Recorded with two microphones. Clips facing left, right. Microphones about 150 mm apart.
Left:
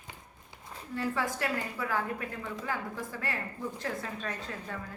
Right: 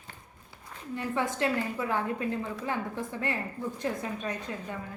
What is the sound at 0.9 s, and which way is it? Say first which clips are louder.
A woman's voice: right 1 dB; 20° right (ahead or behind).